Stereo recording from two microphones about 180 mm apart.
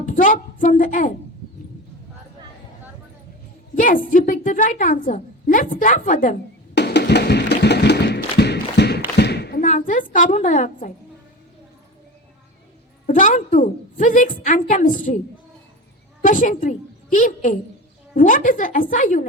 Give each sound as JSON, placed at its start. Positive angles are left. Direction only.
{"t": 0.0, "sound": "a woman's voice", "side_deg": 50}
{"t": 3.8, "sound": "a woman's voice", "side_deg": 50}
{"t": 6.7, "sound": "music", "side_deg": 65}
{"t": 9.1, "sound": "a sound", "side_deg": 65}
{"t": 9.6, "sound": "a sound", "side_deg": 45}
{"t": 13.1, "sound": "a woman's voice", "side_deg": 45}
{"t": 16.2, "sound": "a woman's voice", "side_deg": 45}